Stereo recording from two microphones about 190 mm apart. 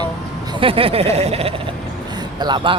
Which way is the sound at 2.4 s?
25° right (ahead or behind).